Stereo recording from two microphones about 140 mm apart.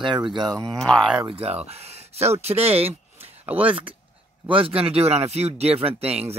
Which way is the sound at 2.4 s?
45° right (ahead or behind).